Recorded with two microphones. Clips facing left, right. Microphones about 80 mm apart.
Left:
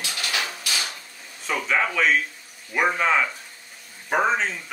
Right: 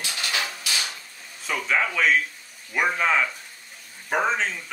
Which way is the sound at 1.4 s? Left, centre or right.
Centre.